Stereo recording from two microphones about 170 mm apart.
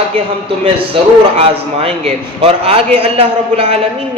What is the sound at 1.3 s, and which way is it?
A man's voice, 35° right (ahead or behind).